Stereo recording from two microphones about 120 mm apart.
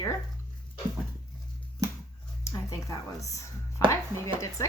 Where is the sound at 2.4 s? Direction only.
25° left (ahead or behind).